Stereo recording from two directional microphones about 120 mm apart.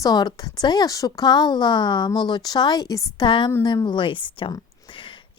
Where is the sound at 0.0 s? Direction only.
35° left (ahead or behind).